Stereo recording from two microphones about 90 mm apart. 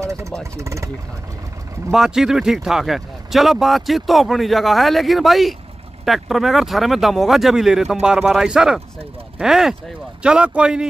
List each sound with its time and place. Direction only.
0.0 s vehicle: 35° right (ahead or behind)
0.6 s speech: 35° right (ahead or behind)
1.9 s speech: 5° right (ahead or behind)